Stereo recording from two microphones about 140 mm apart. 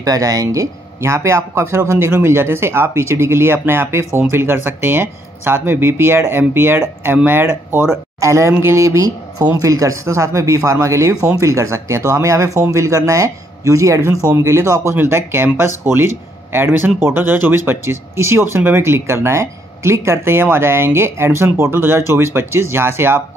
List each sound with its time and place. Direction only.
0.0 s speech: 25° right (ahead or behind)